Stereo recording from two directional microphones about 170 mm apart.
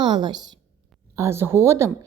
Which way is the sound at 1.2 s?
15° right (ahead or behind).